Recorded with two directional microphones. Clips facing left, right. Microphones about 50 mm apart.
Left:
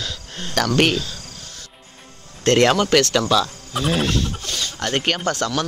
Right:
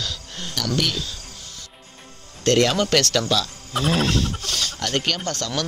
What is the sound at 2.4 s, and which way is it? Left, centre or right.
Speech, left.